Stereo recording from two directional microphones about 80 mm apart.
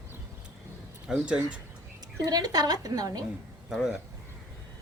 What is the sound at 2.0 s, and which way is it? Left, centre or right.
A woman's voice, right.